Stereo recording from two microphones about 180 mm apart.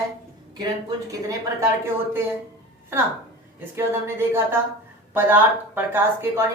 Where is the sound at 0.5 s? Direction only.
20° right (ahead or behind).